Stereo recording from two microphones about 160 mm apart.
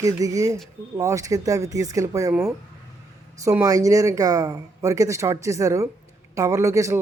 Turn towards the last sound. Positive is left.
turn(degrees=-20)  # may be behind; listen again after turning